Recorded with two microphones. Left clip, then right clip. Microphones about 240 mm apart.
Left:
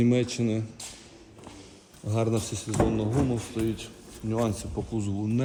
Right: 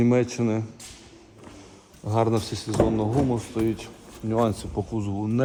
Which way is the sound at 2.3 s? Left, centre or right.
Centre.